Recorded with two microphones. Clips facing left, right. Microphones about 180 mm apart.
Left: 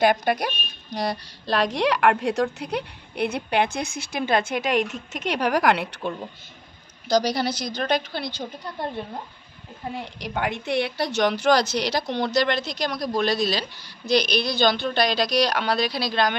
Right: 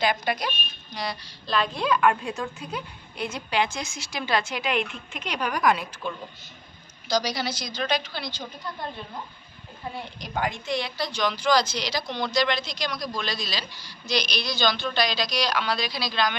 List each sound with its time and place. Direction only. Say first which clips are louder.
0.0 s a woman's voice: left 5 dB; 55° left (ahead or behind)
5.4 s a woman's voice: left 3 dB; 70° left (ahead or behind)
7.2 s a woman's voice: left 5 dB; 55° left (ahead or behind)
10.2 s a woman's voice: left 2 dB; 65° left (ahead or behind)